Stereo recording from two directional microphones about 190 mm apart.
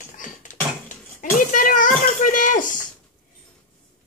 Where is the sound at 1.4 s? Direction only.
45° left (ahead or behind).